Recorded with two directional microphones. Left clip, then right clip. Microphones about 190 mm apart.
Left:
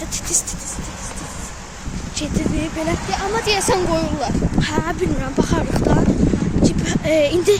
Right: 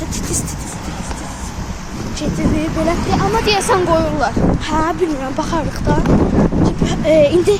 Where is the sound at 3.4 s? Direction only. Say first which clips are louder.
Right 4 dB; 30° left (ahead or behind).